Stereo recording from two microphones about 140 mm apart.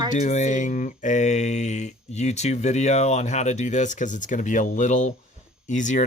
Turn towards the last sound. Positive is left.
turn(degrees=60)  # may be behind; listen again after turning